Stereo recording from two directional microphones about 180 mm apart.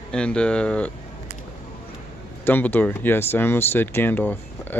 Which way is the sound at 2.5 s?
10° left (ahead or behind).